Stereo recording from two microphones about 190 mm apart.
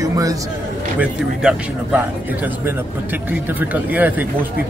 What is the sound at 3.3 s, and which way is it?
A man's voice, 10° right (ahead or behind).